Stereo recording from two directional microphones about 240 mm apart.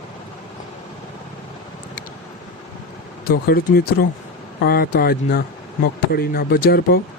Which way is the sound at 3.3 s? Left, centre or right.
Left.